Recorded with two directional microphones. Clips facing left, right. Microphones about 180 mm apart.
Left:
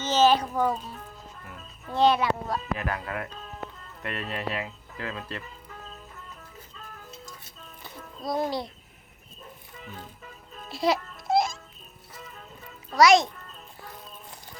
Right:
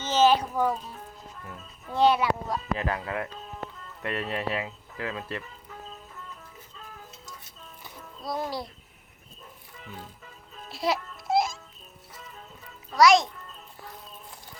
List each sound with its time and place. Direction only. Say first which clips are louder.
0.0 s music: even; 10° right (ahead or behind)
1.9 s speech: even; 10° right (ahead or behind)
2.7 s speech: right 2 dB; 25° right (ahead or behind)
8.3 s a child's voice: left 4 dB; centre (ahead or behind)
10.7 s music: left 3 dB; centre (ahead or behind)
13.0 s a child's voice: left 1 dB; centre (ahead or behind)